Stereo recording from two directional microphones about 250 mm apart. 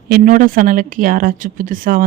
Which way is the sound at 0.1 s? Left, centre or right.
Right.